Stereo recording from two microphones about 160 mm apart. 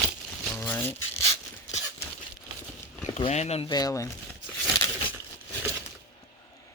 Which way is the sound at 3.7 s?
25° left (ahead or behind).